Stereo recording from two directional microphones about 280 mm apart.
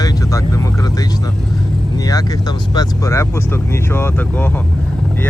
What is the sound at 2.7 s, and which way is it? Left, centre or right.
Speech, centre.